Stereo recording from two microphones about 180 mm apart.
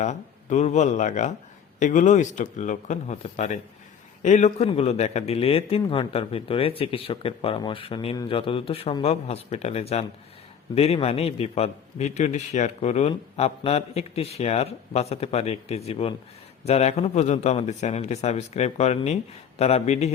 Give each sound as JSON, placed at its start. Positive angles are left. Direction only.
{"t": 0.0, "sound": "a man's voice", "side_deg": 40}